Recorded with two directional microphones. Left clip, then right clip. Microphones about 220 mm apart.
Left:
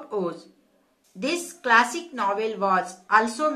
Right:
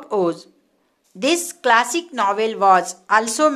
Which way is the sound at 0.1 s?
50° right (ahead or behind).